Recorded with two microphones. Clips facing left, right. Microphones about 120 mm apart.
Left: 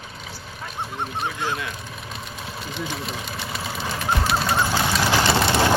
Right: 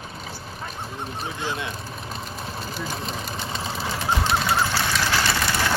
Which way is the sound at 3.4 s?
30° right (ahead or behind).